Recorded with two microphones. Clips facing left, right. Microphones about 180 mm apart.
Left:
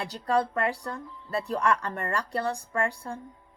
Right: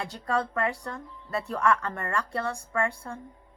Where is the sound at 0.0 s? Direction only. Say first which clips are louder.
Left 3 dB; 30° left (ahead or behind).